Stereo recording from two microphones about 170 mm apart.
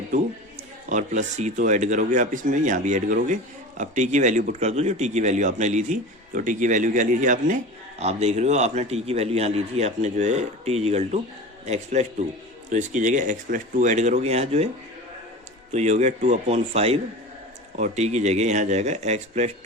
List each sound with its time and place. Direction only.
0.9 s speech: 45° right (ahead or behind)
15.7 s speech: 40° right (ahead or behind)